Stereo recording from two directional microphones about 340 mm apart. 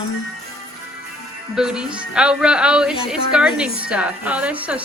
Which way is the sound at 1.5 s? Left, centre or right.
Centre.